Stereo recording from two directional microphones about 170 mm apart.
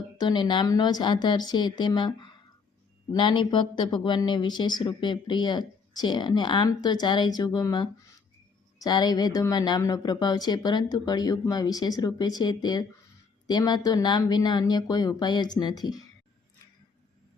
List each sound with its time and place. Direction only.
0.2 s speech: 25° left (ahead or behind)